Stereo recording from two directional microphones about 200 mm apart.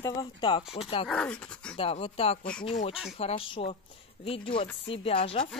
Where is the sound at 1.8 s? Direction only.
25° left (ahead or behind).